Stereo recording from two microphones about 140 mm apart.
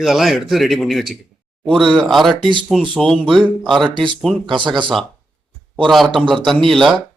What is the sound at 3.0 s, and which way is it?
Speech, centre (ahead or behind).